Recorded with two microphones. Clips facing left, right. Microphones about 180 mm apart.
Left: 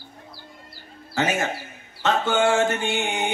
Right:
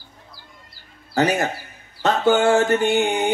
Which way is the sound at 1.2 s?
40° right (ahead or behind).